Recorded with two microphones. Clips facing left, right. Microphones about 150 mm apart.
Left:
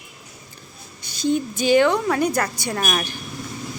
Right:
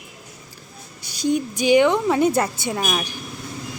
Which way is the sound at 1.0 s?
10° right (ahead or behind).